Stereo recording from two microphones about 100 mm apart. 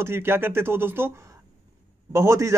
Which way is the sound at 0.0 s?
25° right (ahead or behind).